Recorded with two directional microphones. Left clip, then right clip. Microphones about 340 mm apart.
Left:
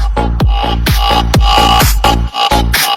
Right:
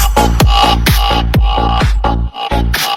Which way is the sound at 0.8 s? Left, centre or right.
Centre.